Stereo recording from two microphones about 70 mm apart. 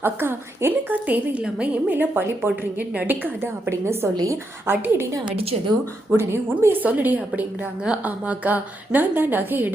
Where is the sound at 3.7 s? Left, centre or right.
Right.